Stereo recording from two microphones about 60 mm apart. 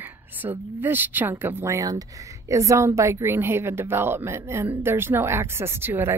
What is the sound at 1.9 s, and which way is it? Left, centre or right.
A woman's voice, right.